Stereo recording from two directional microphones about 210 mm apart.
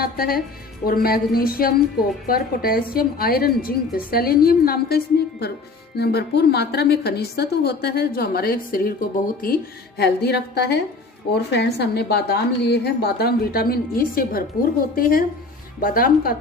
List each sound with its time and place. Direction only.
0.0 s a woman's voice: 45° left (ahead or behind)